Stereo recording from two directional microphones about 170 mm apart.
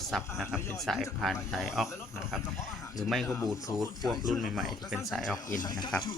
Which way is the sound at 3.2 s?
15° left (ahead or behind).